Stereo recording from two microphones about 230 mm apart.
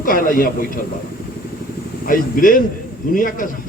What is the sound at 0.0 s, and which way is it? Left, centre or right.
Speech, left.